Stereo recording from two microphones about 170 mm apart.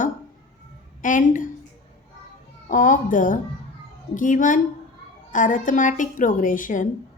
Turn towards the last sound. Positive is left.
turn(degrees=50)  # may be behind; listen again after turning